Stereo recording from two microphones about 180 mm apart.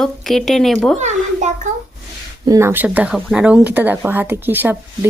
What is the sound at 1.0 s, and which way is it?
Speech, 40° right (ahead or behind).